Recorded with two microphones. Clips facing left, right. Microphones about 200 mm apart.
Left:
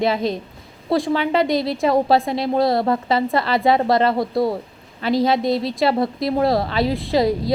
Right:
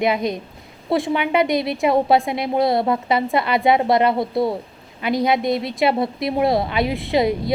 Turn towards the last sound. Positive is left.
turn(degrees=-20)  # may be behind; listen again after turning